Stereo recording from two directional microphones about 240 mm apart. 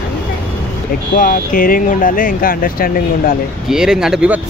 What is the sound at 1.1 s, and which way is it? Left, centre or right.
Speech, left.